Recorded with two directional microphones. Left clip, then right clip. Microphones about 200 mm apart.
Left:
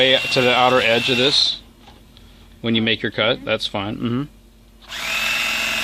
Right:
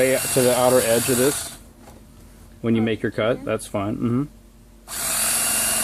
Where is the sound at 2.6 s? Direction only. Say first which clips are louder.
Left 3 dB; 10° left (ahead or behind).